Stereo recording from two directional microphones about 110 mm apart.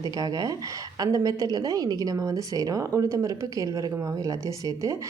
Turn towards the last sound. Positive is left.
turn(degrees=-30)  # may be behind; listen again after turning